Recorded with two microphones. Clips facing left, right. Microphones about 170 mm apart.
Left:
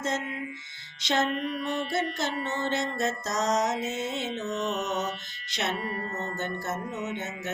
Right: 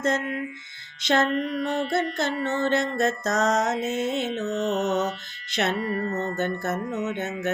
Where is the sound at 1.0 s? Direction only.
60° right (ahead or behind).